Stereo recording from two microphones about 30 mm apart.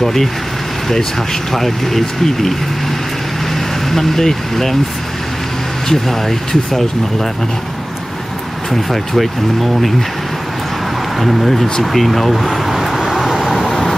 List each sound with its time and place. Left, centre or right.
0.0 s speech: centre
1.5 s speech: centre
3.5 s speech: centre
5.9 s speech: centre
8.6 s speech: centre
11.1 s speech: centre
13.2 s vehicle: centre